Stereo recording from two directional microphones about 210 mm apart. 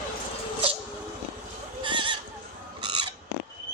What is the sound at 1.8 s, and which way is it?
Neigh, 25° right (ahead or behind).